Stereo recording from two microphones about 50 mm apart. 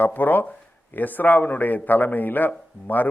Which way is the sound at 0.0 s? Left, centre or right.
Left.